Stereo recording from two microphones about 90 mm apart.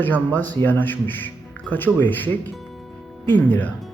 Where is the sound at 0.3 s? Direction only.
20° left (ahead or behind).